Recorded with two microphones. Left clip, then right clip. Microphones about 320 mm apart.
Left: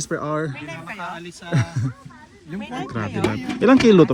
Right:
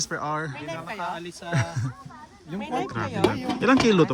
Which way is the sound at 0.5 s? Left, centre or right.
Right.